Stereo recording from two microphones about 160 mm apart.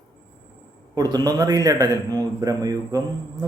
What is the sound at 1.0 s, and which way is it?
A man's voice, 25° right (ahead or behind).